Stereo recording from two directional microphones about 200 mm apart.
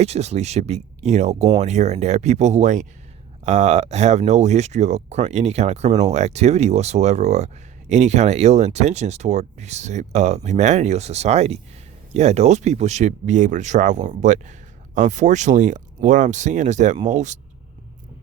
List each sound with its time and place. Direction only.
0.0 s speech: 30° right (ahead or behind)